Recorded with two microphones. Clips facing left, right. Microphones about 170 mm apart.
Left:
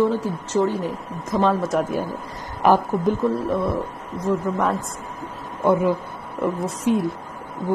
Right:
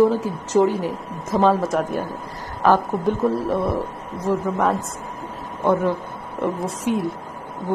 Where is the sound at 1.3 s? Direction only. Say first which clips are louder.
Right 2 dB; centre (ahead or behind).